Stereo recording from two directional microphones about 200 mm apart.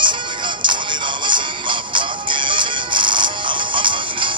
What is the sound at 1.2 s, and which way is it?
Music, 25° right (ahead or behind).